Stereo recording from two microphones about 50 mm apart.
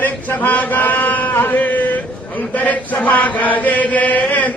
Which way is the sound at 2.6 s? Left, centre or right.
Left.